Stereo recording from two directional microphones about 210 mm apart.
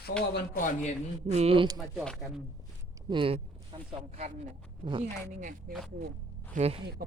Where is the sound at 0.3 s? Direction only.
40° left (ahead or behind).